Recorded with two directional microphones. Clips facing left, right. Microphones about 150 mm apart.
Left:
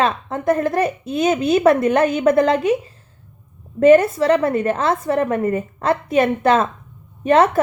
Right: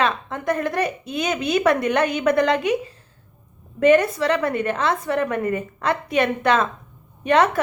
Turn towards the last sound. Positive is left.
turn(degrees=30)  # may be behind; listen again after turning